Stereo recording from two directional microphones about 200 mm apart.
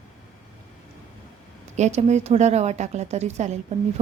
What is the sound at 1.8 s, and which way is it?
A woman's voice, 35° right (ahead or behind).